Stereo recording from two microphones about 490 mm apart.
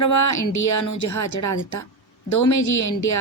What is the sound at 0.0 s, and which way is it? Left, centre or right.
Speech, left.